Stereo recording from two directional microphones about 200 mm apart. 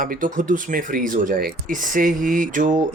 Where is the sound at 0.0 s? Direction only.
45° right (ahead or behind).